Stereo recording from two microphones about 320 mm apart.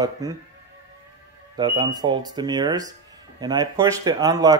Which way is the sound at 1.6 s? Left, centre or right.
Centre.